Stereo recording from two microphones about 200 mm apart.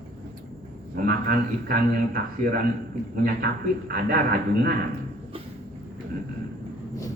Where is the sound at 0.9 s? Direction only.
45° right (ahead or behind).